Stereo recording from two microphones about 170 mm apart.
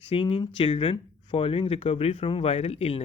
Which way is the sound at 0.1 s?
35° left (ahead or behind).